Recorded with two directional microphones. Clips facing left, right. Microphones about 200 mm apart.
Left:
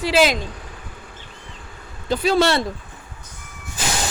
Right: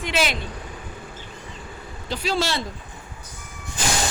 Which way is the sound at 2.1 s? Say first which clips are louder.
Left 7 dB; 60° left (ahead or behind).